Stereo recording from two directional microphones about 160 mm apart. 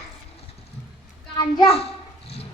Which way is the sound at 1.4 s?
25° left (ahead or behind).